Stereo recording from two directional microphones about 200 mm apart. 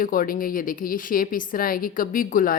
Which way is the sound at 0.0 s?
45° left (ahead or behind).